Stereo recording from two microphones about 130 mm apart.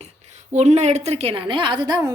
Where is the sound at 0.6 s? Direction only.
60° right (ahead or behind); by 2.1 s 30° right (ahead or behind).